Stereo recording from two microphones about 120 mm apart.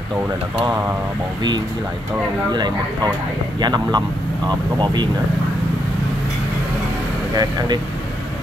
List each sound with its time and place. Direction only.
2.5 s speech: 35° right (ahead or behind)
7.3 s speech: 35° right (ahead or behind)